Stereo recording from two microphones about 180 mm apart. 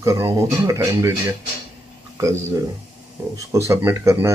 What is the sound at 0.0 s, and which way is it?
Speech, 15° right (ahead or behind).